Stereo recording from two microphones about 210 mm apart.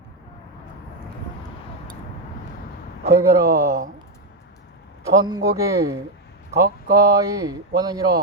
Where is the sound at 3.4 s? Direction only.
50° right (ahead or behind).